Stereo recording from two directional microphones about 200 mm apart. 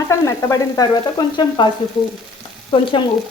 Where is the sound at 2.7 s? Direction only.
25° left (ahead or behind).